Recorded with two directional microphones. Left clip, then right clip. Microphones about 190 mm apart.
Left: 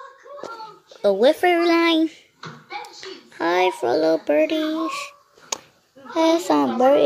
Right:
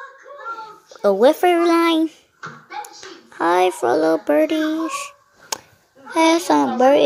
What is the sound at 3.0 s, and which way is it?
A child's voice, centre (ahead or behind).